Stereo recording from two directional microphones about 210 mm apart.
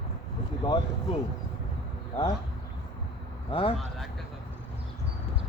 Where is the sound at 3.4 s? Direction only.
25° left (ahead or behind).